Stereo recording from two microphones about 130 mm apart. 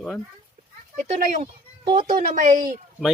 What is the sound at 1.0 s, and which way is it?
A woman's voice, 90° right.